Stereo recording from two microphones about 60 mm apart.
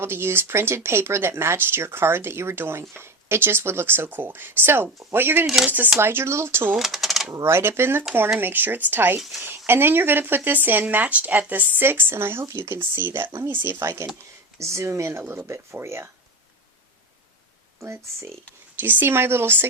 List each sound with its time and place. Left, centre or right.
0.0 s speech: right
6.0 s speech: right
6.7 s speech: centre
7.4 s speech: right
13.7 s speech: right
17.7 s speech: right
18.8 s speech: right